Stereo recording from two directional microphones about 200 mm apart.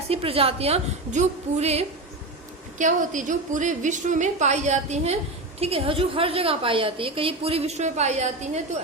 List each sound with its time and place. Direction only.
0.1 s a woman's voice: 30° right (ahead or behind)